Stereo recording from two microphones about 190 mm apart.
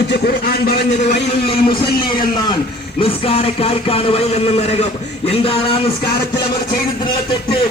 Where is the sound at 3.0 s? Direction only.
30° left (ahead or behind).